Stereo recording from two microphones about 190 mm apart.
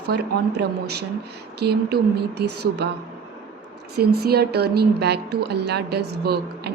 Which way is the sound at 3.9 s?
55° right (ahead or behind).